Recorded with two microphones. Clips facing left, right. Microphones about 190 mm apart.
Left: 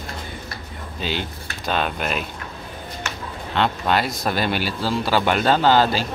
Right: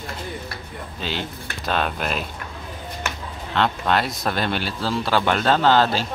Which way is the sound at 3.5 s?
5° left (ahead or behind).